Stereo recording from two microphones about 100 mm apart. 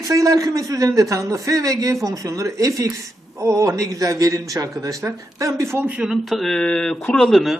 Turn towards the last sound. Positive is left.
turn(degrees=0)  # may be behind; listen again after turning